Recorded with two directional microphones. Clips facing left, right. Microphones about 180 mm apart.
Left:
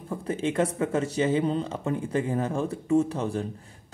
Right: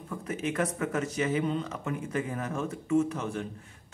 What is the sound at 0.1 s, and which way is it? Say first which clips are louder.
Speech: left 5 dB; 30° left (ahead or behind).